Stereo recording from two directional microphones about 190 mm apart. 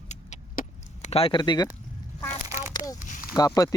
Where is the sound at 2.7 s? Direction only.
20° left (ahead or behind).